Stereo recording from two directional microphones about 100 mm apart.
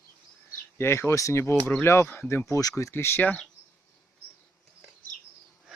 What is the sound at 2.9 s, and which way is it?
Speech, 20° left (ahead or behind).